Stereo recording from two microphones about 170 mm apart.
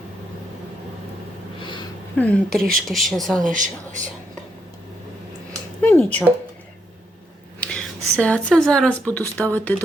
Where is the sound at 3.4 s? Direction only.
50° right (ahead or behind).